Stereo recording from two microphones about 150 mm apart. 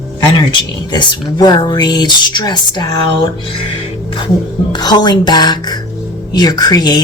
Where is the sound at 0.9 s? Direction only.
25° left (ahead or behind).